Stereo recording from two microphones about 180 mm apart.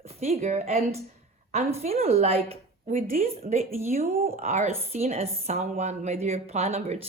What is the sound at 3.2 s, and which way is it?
A woman's voice, 35° right (ahead or behind).